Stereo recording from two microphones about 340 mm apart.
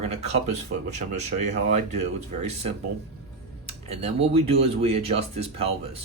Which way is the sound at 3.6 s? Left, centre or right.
Centre.